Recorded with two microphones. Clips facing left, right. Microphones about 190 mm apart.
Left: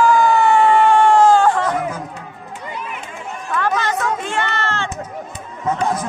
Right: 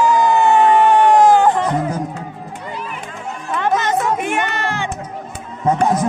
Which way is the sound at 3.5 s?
20° right (ahead or behind).